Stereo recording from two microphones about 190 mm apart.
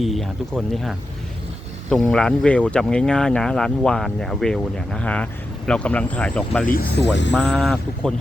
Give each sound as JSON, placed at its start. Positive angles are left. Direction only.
{"t": 0.0, "sound": "speech", "side_deg": 0}
{"t": 6.7, "sound": "speech", "side_deg": 50}
{"t": 7.3, "sound": "speech", "side_deg": 5}